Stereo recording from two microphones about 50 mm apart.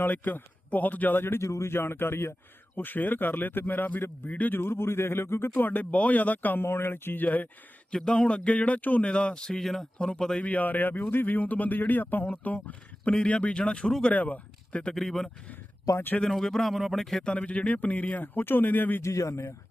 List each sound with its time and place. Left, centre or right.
0.0 s speech: left
1.4 s speech: left
1.7 s speech: left
2.7 s speech: left
4.5 s speech: left
5.5 s speech: left
6.6 s speech: left
7.9 s speech: centre; by 9.0 s left
9.0 s speech: left
10.4 s speech: left
14.1 s speech: left
14.9 s speech: centre
17.2 s speech: left
19.0 s speech: left